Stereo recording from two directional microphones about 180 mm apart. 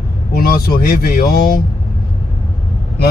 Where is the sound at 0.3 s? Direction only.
55° left (ahead or behind).